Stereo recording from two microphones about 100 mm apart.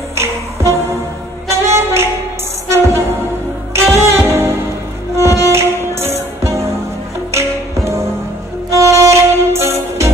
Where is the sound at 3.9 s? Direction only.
25° right (ahead or behind).